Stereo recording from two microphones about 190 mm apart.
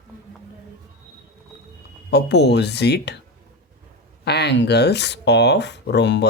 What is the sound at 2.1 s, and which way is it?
Speech, 60° left (ahead or behind).